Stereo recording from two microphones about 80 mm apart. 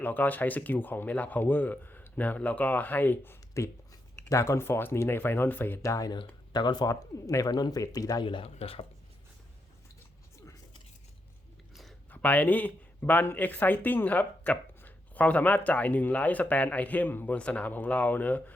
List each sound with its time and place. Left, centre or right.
0.0 s speech: left
3.6 s speech: left
5.8 s speech: left
6.1 s speech: left
7.3 s speech: left
7.5 s speech: left
8.2 s speech: left
11.7 s a sound: centre
12.1 s speech: left